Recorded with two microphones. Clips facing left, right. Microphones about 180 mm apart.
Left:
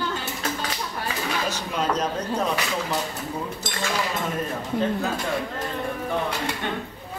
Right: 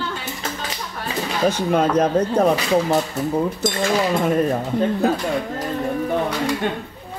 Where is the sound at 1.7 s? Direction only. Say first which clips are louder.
Right 7 dB; 55° right (ahead or behind).